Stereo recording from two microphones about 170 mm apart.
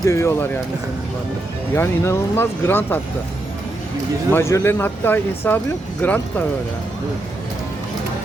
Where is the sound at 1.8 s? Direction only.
15° left (ahead or behind).